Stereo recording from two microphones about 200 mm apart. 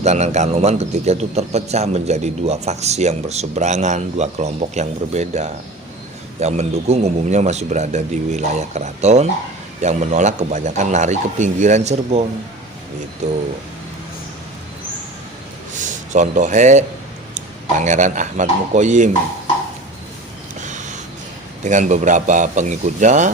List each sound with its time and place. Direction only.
0.0 s a man's voice: 35° right (ahead or behind)
15.7 s a man's voice: 35° right (ahead or behind)
20.7 s a sound: 35° right (ahead or behind)
21.6 s a man's voice: 35° right (ahead or behind)